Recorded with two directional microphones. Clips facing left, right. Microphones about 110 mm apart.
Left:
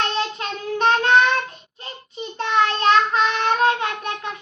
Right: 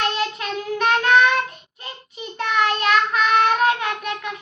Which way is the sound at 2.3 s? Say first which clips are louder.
Left 1 dB; 30° left (ahead or behind).